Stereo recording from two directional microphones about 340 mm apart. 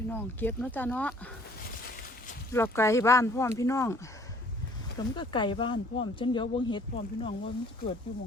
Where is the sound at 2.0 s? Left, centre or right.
Left.